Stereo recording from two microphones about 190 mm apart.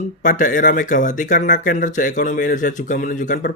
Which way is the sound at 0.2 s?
45° left (ahead or behind).